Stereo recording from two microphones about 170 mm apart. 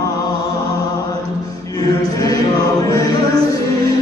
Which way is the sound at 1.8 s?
20° left (ahead or behind).